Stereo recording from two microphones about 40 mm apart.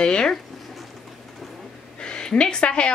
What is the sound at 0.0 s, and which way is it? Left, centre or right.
Speech, centre.